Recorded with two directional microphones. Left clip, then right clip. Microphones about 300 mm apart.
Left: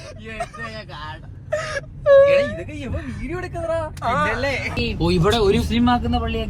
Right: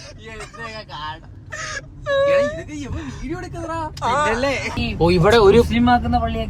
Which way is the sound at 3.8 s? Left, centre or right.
Centre.